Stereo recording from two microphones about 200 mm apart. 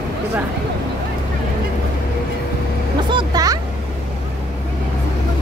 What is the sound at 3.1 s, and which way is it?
Music, 20° right (ahead or behind).